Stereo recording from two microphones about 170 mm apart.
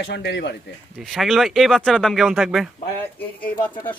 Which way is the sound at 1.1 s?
Centre (ahead or behind).